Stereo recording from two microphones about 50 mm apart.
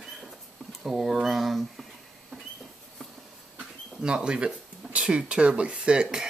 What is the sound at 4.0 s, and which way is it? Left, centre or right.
Speech, centre.